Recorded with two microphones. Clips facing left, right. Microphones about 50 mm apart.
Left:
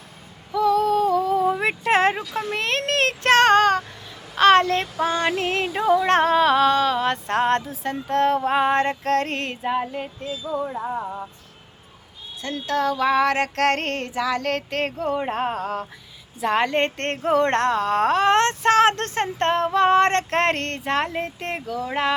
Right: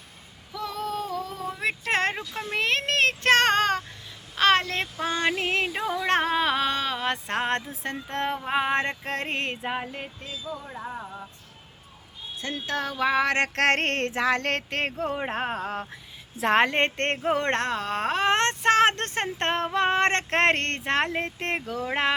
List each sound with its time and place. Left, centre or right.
0.5 s female singing: centre
1.5 s a sound: left
1.8 s child singing: centre
4.4 s female singing: centre
8.1 s music: centre
8.4 s female singing: centre
9.0 s music: centre
12.4 s music: right
13.7 s child singing: right
14.3 s a sound: right
14.7 s speech: right
15.2 s speech: centre
16.4 s child singing: right
16.6 s speech: right